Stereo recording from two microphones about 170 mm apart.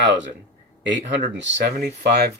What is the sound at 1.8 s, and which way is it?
Speech, 65° right (ahead or behind).